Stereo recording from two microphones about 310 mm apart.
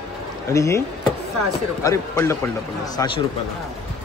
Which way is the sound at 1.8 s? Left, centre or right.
Centre.